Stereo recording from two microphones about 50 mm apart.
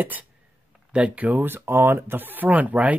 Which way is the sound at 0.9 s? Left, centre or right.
Right.